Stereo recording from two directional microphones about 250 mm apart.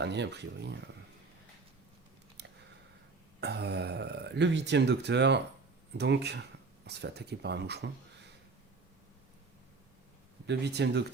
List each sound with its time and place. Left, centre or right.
0.0 s speech: right
2.4 s a sound: right
3.4 s speech: right
10.4 s speech: right